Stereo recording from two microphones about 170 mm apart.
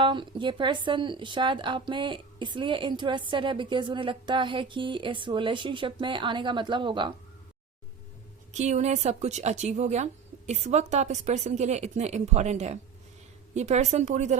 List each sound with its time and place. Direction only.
0.0 s speech: 30° right (ahead or behind)
8.5 s a woman's voice: 40° right (ahead or behind)